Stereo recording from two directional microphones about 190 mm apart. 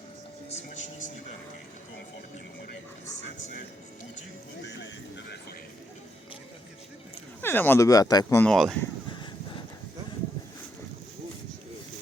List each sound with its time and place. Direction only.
0.5 s a sound: 40° left (ahead or behind)
4.6 s music: 70° left (ahead or behind)
7.4 s speech: 10° left (ahead or behind)
8.4 s speech: centre (ahead or behind)